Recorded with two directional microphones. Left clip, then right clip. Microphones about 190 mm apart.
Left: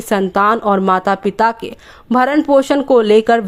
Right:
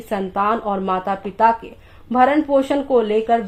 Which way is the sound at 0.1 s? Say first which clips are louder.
Left 6 dB; 40° left (ahead or behind).